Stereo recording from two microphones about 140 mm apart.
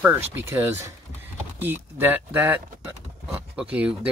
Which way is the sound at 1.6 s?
15° right (ahead or behind).